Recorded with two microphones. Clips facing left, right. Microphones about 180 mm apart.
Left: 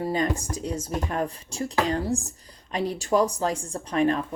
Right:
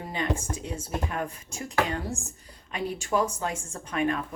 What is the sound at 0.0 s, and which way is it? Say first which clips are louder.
Speech: left 5 dB; 40° left (ahead or behind).